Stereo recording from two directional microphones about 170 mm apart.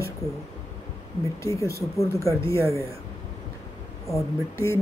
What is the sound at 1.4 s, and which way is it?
Speech, 20° left (ahead or behind).